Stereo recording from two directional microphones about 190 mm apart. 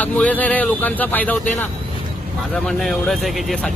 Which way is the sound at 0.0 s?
10° left (ahead or behind).